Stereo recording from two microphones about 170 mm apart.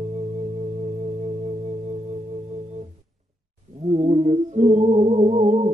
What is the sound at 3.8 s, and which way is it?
Music, 40° right (ahead or behind).